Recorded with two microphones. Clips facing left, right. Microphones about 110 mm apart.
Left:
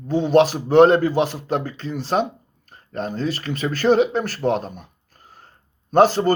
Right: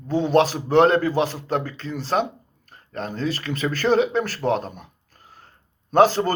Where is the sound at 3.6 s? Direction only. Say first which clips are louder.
Left 3 dB; 15° left (ahead or behind).